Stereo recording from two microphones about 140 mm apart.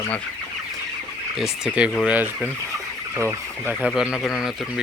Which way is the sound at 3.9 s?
Centre (ahead or behind).